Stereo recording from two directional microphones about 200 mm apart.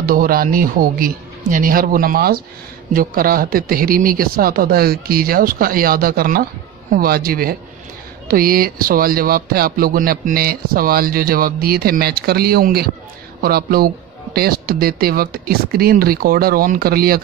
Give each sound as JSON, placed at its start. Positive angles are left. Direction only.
{"t": 0.0, "sound": "speech", "side_deg": -45}